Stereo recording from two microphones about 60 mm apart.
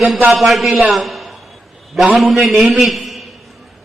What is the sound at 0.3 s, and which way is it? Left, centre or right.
A man's voice, centre.